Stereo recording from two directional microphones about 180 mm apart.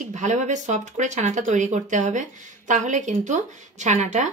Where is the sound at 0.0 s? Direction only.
45° right (ahead or behind).